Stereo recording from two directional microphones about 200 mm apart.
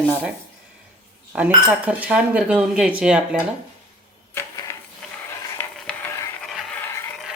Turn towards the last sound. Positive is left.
turn(degrees=5)  # may be behind; listen again after turning